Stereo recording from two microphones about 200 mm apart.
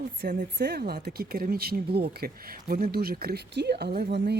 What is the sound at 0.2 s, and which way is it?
Speech, 55° right (ahead or behind).